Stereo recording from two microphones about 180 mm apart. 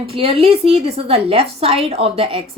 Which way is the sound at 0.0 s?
30° right (ahead or behind).